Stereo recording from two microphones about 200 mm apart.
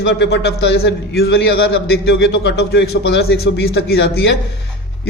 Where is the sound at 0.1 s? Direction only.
55° left (ahead or behind).